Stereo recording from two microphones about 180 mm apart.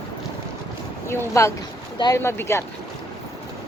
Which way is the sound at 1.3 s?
15° left (ahead or behind).